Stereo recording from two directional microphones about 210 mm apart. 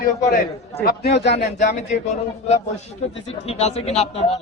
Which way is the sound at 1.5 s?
35° left (ahead or behind).